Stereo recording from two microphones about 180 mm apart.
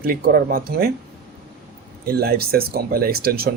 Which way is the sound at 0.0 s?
55° right (ahead or behind).